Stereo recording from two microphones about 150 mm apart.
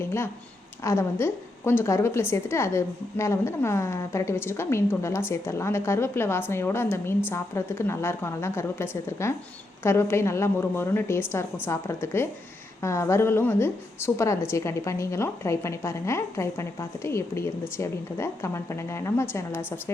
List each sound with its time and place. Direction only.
0.9 s a woman's voice: 20° left (ahead or behind)